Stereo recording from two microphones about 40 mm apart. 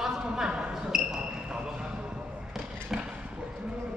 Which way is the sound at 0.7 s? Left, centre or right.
Centre.